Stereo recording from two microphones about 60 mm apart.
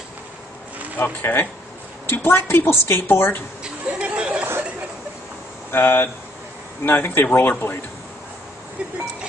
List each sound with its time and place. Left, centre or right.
0.9 s a woman's voice: left
3.6 s chatter: right
5.7 s a woman's voice: left